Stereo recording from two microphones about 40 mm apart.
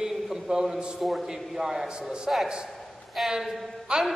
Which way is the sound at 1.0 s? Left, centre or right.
Centre.